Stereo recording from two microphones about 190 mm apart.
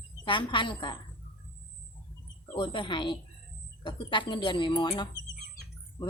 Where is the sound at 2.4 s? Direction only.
25° left (ahead or behind).